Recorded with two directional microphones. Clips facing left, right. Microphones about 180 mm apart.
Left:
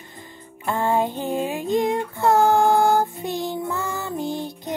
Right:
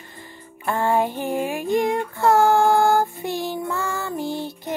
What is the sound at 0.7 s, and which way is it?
Female singing, 20° left (ahead or behind).